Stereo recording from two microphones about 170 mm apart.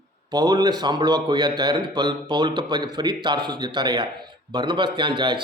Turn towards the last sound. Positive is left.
turn(degrees=-25)  # may be behind; listen again after turning